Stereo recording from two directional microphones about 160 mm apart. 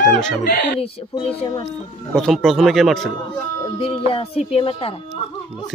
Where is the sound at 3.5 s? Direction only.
30° left (ahead or behind).